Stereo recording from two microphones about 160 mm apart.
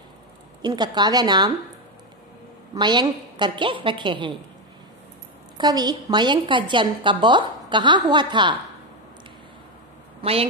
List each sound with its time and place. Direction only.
0.6 s a woman's voice: 25° right (ahead or behind)
2.7 s a woman's voice: 25° right (ahead or behind)
5.6 s a woman's voice: 25° right (ahead or behind)